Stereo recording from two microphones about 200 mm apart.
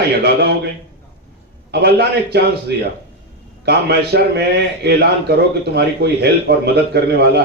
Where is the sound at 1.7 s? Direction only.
55° right (ahead or behind).